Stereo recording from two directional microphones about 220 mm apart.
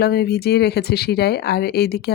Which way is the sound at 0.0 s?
45° left (ahead or behind).